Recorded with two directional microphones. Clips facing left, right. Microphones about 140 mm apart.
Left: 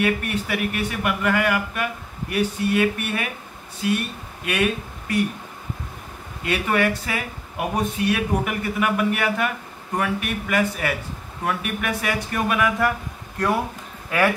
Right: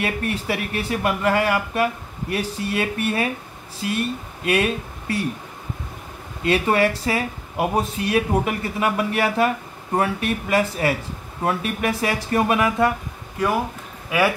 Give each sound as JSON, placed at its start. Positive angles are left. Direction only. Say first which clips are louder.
{"t": 0.0, "sound": "speech", "louder": "left 2 dB", "side_deg": -30}
{"t": 4.5, "sound": "speech", "louder": "right 2 dB", "side_deg": -30}
{"t": 6.4, "sound": "speech", "louder": "right 3 dB", "side_deg": -30}
{"t": 14.1, "sound": "a man's voice", "louder": "right 1 dB", "side_deg": -5}